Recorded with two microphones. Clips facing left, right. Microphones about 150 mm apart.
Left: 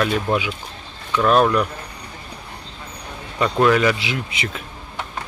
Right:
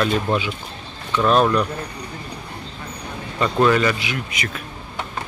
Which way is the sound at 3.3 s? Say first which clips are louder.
Left 1 dB; centre (ahead or behind).